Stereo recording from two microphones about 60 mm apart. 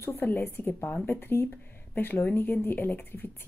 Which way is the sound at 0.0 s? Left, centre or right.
Left.